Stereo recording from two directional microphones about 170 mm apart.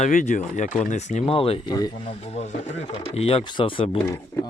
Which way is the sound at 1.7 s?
25° left (ahead or behind).